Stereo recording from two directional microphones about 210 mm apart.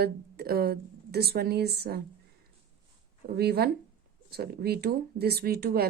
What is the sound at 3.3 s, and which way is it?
Speech, 50° right (ahead or behind).